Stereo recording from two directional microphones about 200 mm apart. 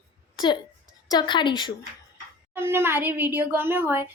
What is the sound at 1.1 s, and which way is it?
Speech, 20° left (ahead or behind).